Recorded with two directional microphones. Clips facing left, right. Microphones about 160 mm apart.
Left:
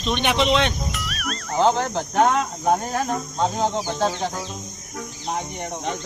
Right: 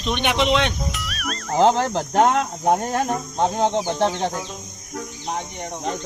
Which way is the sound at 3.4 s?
20° right (ahead or behind).